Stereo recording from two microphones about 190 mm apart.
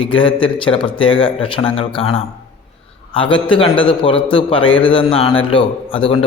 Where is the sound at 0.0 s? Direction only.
25° left (ahead or behind).